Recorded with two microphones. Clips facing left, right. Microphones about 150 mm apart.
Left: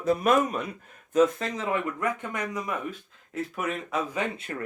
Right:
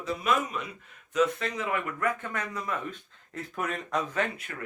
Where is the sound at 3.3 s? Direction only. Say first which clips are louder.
Left 3 dB; centre (ahead or behind).